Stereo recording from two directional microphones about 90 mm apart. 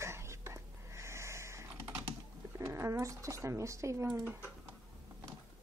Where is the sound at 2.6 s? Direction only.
30° right (ahead or behind).